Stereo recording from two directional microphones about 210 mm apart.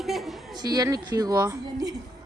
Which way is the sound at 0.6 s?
20° right (ahead or behind).